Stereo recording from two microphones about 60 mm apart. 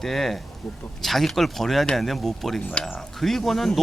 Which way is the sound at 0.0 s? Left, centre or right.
Centre.